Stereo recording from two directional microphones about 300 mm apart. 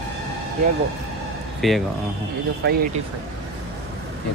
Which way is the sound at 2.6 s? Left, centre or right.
Right.